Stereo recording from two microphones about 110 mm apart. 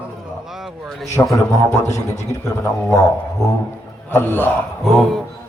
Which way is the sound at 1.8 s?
90° left.